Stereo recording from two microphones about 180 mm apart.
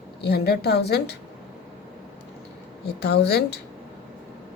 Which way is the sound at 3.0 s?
65° left (ahead or behind).